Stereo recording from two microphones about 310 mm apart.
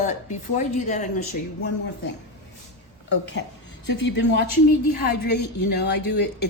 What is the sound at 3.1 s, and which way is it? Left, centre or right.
Speech, left.